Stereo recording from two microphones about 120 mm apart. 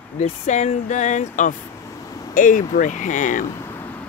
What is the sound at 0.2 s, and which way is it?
Speech, 75° left (ahead or behind).